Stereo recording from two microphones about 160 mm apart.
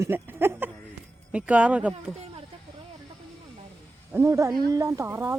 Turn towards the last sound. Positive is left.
turn(degrees=-15)  # may be behind; listen again after turning